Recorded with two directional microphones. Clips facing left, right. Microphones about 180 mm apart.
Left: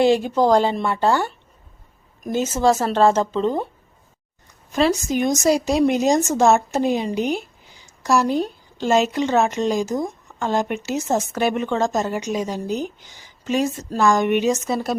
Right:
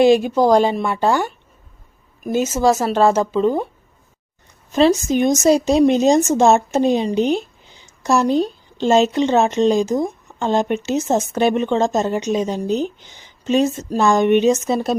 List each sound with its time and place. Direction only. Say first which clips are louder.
0.0 s speech: right 3 dB; 15° right (ahead or behind)
2.4 s speech: right 1 dB; 10° right (ahead or behind)
4.7 s speech: right 4 dB; 25° right (ahead or behind)